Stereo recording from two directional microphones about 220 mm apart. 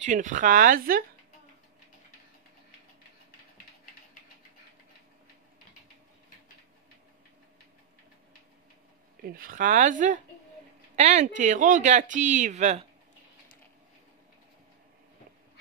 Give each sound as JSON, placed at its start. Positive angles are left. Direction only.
{"t": 0.0, "sound": "speech", "side_deg": -35}
{"t": 9.2, "sound": "speech", "side_deg": -40}